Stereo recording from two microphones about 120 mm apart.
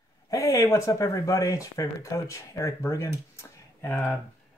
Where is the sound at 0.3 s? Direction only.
25° left (ahead or behind).